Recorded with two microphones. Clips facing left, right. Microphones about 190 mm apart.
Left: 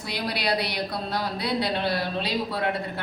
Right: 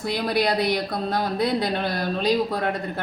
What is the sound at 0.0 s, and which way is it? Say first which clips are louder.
A woman's voice: right 6 dB; 50° right (ahead or behind).